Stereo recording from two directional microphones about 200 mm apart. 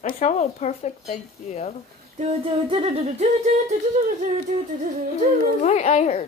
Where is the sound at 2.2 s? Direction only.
30° right (ahead or behind).